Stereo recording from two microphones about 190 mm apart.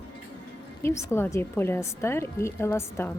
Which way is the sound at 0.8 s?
15° left (ahead or behind).